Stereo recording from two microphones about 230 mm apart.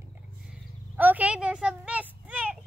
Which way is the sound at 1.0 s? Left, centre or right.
Centre.